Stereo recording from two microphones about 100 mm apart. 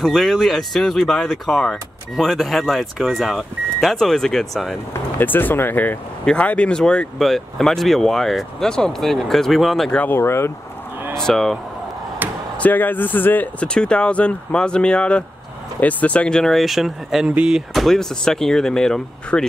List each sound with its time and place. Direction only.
0.0 s speech: centre (ahead or behind)
5.2 s speech: 20° left (ahead or behind); by 9.9 s centre (ahead or behind)
9.9 s speech: 20° left (ahead or behind)
11.1 s speech: 5° left (ahead or behind)
12.6 s speech: 20° left (ahead or behind)